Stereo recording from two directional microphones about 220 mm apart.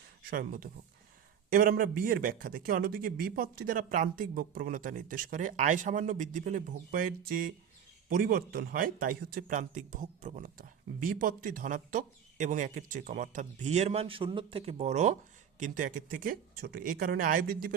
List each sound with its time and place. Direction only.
0.3 s speech: 40° right (ahead or behind)